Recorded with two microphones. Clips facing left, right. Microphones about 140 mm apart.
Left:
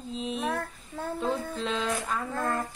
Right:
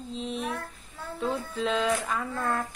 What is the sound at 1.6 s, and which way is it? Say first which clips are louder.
Speech: right 3 dB; centre (ahead or behind).